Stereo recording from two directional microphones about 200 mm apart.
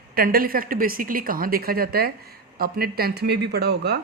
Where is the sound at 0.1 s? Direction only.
45° right (ahead or behind).